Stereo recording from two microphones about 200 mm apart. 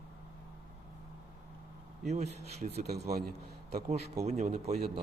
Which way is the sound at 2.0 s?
35° right (ahead or behind).